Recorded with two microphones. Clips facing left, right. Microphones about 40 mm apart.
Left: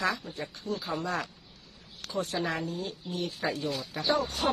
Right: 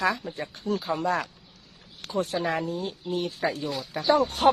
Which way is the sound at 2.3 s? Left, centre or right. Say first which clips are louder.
Right 3 dB; centre.